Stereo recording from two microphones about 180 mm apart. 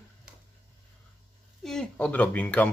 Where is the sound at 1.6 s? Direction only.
5° left (ahead or behind).